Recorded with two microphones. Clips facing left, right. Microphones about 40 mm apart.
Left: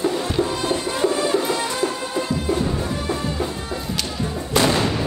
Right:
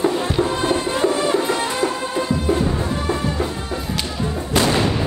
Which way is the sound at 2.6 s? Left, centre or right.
Right.